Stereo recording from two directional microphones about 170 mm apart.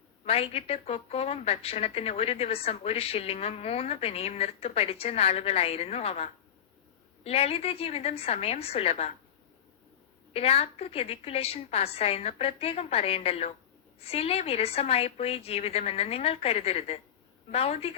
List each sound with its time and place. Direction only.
0.3 s a woman's voice: 35° left (ahead or behind)
10.3 s a woman's voice: 35° left (ahead or behind)